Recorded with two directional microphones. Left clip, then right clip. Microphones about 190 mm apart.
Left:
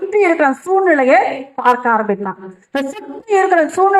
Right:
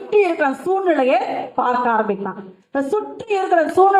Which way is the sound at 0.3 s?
15° left (ahead or behind).